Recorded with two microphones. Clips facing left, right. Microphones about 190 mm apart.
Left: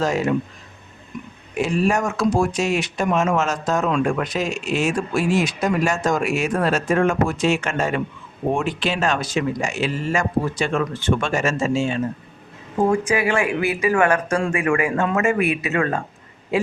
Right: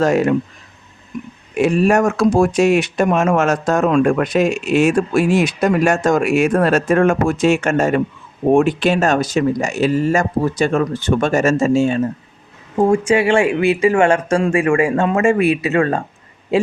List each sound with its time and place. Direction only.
0.0 s speech: 55° right (ahead or behind)
1.5 s speech: 60° right (ahead or behind); by 12.0 s 45° right (ahead or behind)
12.9 s speech: 30° right (ahead or behind)